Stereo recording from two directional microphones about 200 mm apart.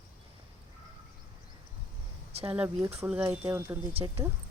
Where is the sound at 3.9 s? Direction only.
30° right (ahead or behind).